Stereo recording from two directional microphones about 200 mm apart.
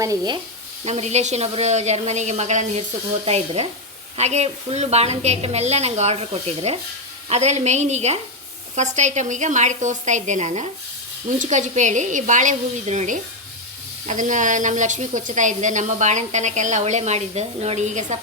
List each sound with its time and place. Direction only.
0.0 s speech: 15° right (ahead or behind)
0.9 s a woman's voice: 35° right (ahead or behind)